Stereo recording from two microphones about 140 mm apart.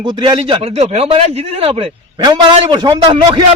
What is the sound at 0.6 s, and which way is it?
A man's voice, 50° right (ahead or behind).